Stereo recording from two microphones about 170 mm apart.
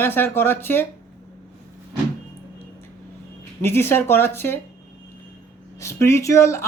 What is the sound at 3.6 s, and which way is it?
Speech, 15° left (ahead or behind).